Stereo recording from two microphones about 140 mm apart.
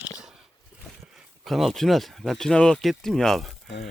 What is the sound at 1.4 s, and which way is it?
Speech, centre (ahead or behind).